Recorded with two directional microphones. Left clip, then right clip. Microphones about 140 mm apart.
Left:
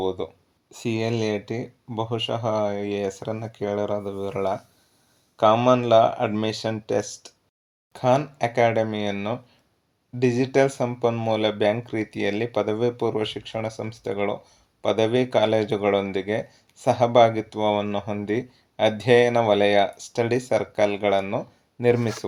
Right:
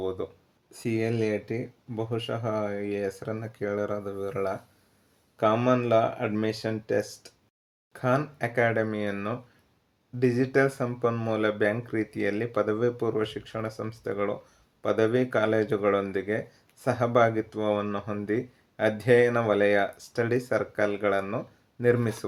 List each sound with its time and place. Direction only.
0.7 s speech: 20° left (ahead or behind)